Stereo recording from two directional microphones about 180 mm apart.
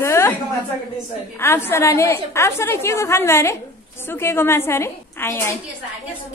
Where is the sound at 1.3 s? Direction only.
15° left (ahead or behind).